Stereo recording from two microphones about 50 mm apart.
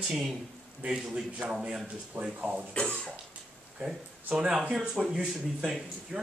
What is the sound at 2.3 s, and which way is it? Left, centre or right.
Speech, right.